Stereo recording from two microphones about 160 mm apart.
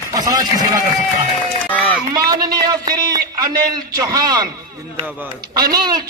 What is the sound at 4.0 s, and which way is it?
Speech, 20° right (ahead or behind).